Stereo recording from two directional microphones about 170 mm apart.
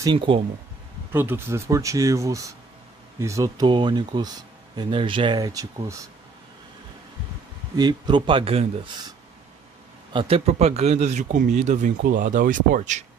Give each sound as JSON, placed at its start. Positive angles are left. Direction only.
{"t": 0.0, "sound": "speech", "side_deg": -25}
{"t": 1.1, "sound": "speech", "side_deg": -15}
{"t": 7.7, "sound": "speech", "side_deg": -25}
{"t": 10.1, "sound": "speech", "side_deg": -35}